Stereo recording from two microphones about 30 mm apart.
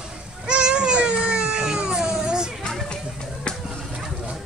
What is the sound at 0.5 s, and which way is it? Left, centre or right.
Baby cry, right.